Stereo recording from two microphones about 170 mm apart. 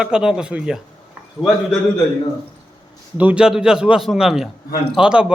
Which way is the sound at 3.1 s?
10° right (ahead or behind).